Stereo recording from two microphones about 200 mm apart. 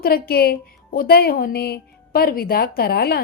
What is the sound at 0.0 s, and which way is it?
A woman's voice, 50° left (ahead or behind).